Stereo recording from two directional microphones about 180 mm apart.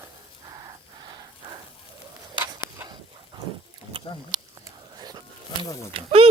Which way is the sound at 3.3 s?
25° right (ahead or behind).